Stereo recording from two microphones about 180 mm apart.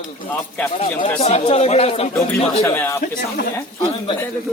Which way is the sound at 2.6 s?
10° left (ahead or behind).